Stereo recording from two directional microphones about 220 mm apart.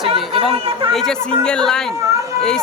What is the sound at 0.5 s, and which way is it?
Speech, 25° right (ahead or behind).